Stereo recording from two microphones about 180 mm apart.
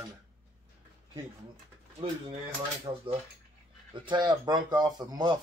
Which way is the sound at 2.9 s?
25° right (ahead or behind).